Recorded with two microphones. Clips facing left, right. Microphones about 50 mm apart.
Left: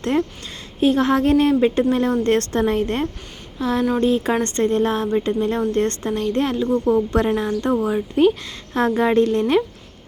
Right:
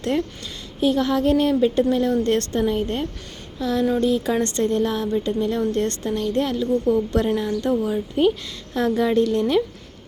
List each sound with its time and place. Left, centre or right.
0.0 s a woman's voice: left
3.6 s a woman's voice: left
8.2 s a woman's voice: left
9.0 s a woman's voice: left